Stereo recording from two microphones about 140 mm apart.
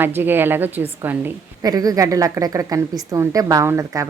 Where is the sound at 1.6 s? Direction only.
25° right (ahead or behind).